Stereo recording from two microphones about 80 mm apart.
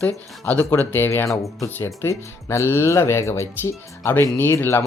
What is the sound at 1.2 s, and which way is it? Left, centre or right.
Speech, left.